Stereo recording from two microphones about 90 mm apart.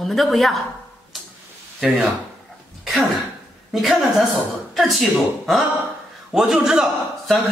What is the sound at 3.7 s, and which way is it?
A woman's voice, centre (ahead or behind).